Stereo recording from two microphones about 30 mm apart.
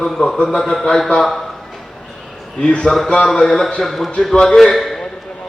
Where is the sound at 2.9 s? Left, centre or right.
Left.